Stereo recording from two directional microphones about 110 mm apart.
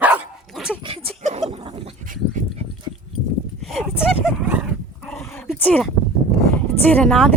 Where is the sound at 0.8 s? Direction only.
60° right (ahead or behind).